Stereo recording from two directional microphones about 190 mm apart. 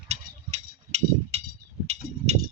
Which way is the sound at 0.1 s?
35° right (ahead or behind).